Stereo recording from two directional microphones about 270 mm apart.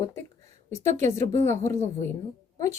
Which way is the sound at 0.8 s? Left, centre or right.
Right.